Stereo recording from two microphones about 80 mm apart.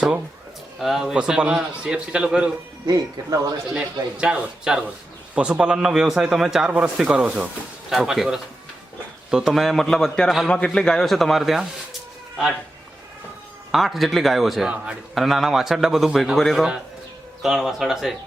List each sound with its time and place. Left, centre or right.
0.8 s a man's voice: centre
2.8 s speech: right
4.2 s a man's voice: centre
7.9 s a man's voice: centre
10.5 s a man's voice: centre
13.7 s a man's voice: centre